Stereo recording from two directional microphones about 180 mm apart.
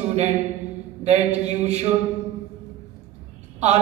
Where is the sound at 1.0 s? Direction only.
40° right (ahead or behind).